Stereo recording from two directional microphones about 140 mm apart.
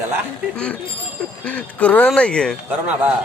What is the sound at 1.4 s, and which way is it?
Speech, 10° left (ahead or behind).